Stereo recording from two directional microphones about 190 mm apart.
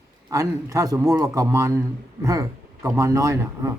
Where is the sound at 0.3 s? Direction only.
15° right (ahead or behind).